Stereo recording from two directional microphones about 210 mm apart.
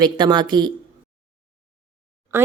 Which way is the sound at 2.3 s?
10° right (ahead or behind).